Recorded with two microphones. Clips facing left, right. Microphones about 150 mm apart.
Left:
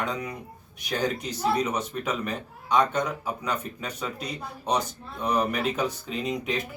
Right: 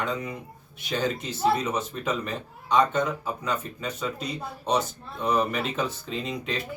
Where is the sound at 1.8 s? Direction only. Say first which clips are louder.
Even; 10° left (ahead or behind).